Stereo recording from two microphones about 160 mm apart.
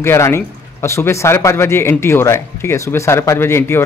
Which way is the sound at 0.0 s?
15° left (ahead or behind).